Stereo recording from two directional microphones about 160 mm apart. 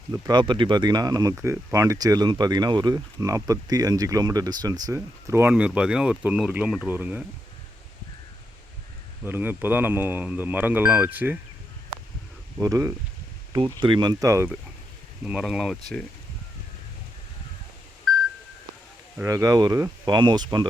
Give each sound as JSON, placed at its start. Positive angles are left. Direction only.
{"t": 0.1, "sound": "speech", "side_deg": -25}
{"t": 9.2, "sound": "speech", "side_deg": -10}
{"t": 12.6, "sound": "speech", "side_deg": -20}
{"t": 15.2, "sound": "speech", "side_deg": -5}
{"t": 19.2, "sound": "speech", "side_deg": -20}